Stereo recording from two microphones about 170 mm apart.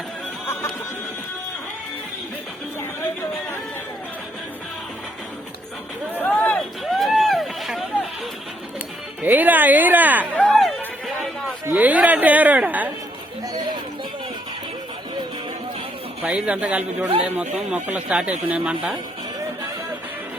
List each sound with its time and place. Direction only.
6.1 s a sound: 5° left (ahead or behind)
7.0 s run: centre (ahead or behind)
9.2 s a woman's voice: 10° right (ahead or behind)
10.3 s music: 5° left (ahead or behind)
11.6 s a sound: 10° right (ahead or behind)
13.5 s chatter: 25° right (ahead or behind)
16.2 s a woman's voice: 5° right (ahead or behind)